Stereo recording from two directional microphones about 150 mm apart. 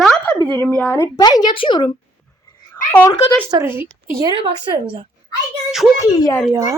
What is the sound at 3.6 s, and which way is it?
Speech, 15° right (ahead or behind).